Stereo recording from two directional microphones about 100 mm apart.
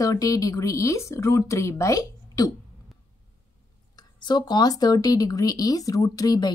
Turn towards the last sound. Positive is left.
turn(degrees=40)  # may be behind; listen again after turning